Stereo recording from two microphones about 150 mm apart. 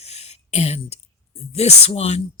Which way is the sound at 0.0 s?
45° left (ahead or behind).